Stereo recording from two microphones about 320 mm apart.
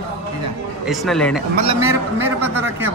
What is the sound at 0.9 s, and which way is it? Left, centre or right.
Speech, centre.